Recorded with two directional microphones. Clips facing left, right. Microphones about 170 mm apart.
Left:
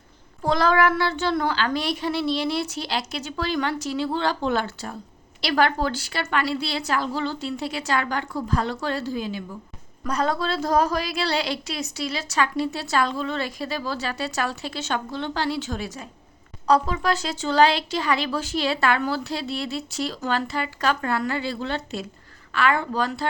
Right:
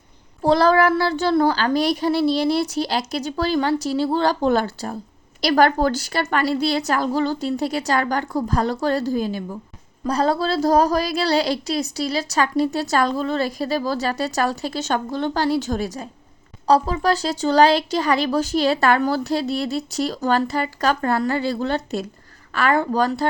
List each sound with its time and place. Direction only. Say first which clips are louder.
0.4 s a woman's voice: right 4 dB; 35° right (ahead or behind)